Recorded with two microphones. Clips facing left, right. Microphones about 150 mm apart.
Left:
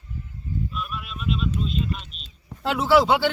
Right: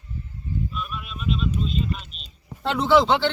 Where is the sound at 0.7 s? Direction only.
Centre (ahead or behind).